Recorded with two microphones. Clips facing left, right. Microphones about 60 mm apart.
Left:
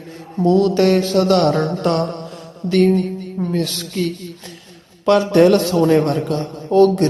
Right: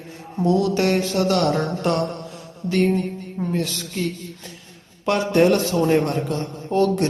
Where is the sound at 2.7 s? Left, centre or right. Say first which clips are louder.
Left 5 dB; left.